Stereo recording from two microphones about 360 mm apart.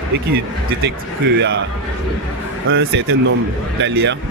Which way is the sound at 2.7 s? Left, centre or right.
Right.